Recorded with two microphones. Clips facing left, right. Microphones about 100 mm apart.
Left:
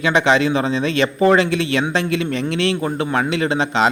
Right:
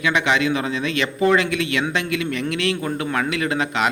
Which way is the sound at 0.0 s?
30° left (ahead or behind).